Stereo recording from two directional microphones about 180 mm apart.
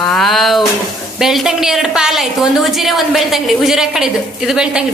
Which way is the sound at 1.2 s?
Centre (ahead or behind).